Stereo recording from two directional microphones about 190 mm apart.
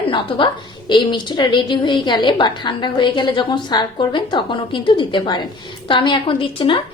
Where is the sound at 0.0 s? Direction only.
25° left (ahead or behind).